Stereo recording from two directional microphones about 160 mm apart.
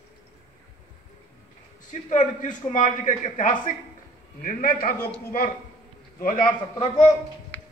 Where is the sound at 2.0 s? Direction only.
50° left (ahead or behind).